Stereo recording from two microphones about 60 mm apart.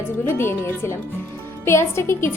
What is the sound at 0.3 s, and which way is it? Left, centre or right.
A woman's voice, left.